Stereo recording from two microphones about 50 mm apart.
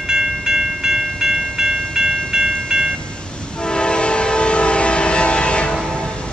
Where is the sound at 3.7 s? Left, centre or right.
Centre.